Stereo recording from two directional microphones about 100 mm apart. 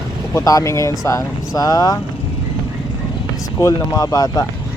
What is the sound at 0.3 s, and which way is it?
Speech, 35° left (ahead or behind).